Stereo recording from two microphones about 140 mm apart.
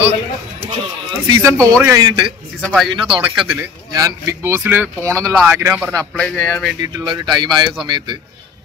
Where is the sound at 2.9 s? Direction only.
35° right (ahead or behind).